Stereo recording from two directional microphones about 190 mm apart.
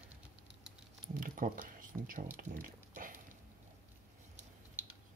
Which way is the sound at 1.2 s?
45° right (ahead or behind).